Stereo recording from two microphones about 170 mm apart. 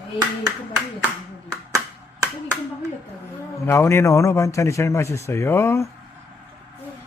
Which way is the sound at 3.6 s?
15° left (ahead or behind).